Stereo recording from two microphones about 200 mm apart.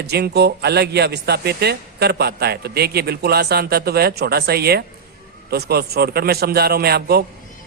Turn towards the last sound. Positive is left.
turn(degrees=-50)  # may be behind; listen again after turning